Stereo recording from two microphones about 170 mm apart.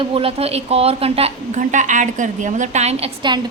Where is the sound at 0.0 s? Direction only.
35° right (ahead or behind).